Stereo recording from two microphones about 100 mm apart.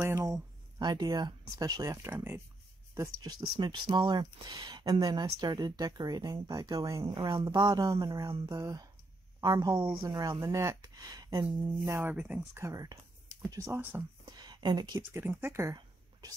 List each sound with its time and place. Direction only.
0.0 s speech: 30° right (ahead or behind)
0.7 s speech: 45° right (ahead or behind); by 3.3 s 30° right (ahead or behind)
3.3 s speech: 45° right (ahead or behind)
7.1 s speech: 55° right (ahead or behind)
7.4 s speech: 40° right (ahead or behind)
10.5 s speech: 35° right (ahead or behind)
12.1 s speech: 20° right (ahead or behind)
14.2 s a sound: 45° right (ahead or behind)
15.0 s speech: 20° right (ahead or behind)
15.7 s a sound: 40° right (ahead or behind)